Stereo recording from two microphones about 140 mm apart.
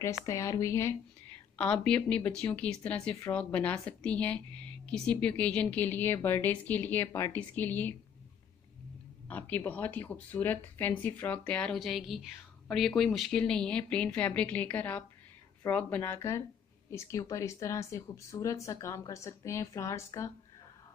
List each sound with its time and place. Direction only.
0.2 s speech: 20° left (ahead or behind)
1.9 s speech: 10° left (ahead or behind)
9.3 s speech: 15° left (ahead or behind)